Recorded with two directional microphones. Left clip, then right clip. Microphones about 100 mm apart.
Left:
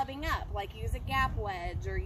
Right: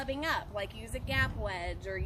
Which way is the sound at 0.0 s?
40° right (ahead or behind).